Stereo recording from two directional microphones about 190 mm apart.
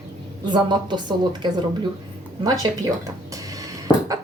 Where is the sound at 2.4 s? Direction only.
20° right (ahead or behind).